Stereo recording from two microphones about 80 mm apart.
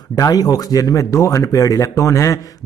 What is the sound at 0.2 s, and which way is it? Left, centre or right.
Speech, left.